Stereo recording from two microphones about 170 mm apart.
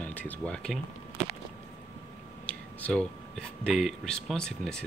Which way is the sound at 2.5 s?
10° left (ahead or behind).